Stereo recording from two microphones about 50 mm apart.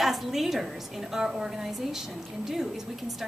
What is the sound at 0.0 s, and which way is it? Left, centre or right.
A woman's voice, centre.